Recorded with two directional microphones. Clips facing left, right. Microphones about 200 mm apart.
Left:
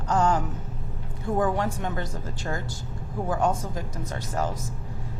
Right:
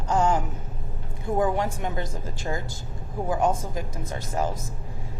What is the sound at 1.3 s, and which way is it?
A woman's voice, 15° right (ahead or behind).